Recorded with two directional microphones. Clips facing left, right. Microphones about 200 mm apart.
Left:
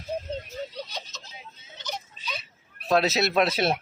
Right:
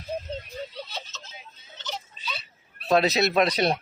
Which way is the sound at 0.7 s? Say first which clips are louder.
Left 1 dB; 15° left (ahead or behind).